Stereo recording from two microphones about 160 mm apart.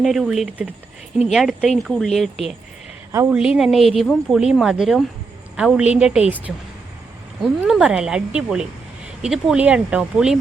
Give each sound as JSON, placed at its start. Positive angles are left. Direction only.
{"t": 0.0, "sound": "speech", "side_deg": 0}
{"t": 3.1, "sound": "speech", "side_deg": -20}
{"t": 3.3, "sound": "a woman's voice", "side_deg": -5}